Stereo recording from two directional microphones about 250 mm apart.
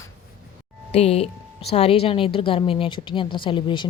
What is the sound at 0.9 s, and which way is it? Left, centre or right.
A woman's voice, left.